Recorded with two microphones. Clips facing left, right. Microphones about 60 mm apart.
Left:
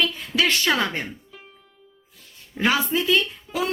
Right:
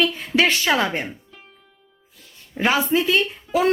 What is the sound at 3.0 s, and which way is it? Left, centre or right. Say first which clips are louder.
Speech: right 1 dB; right.